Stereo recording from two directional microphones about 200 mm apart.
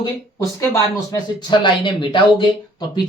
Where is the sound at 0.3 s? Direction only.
15° left (ahead or behind).